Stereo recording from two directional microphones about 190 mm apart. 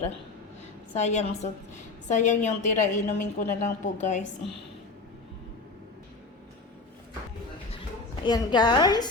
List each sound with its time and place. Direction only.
0.9 s a woman's voice: 35° left (ahead or behind)
8.2 s a woman's voice: 25° left (ahead or behind)